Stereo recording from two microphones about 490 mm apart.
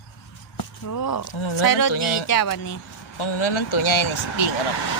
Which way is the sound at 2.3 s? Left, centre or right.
Left.